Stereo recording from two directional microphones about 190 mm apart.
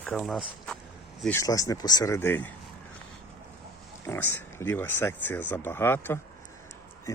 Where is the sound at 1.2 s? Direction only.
10° left (ahead or behind).